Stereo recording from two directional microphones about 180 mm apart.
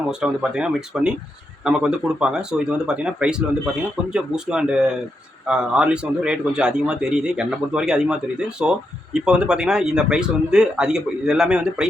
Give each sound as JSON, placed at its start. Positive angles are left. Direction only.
{"t": 0.1, "sound": "a man's voice", "side_deg": -5}